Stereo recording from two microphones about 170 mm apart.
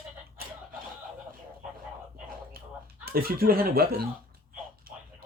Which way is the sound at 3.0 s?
60° right (ahead or behind).